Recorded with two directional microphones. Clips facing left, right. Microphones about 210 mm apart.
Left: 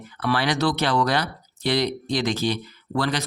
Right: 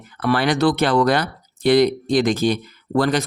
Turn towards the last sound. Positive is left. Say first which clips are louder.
# right 6 dB
turn(degrees=-50)  # may be behind; listen again after turning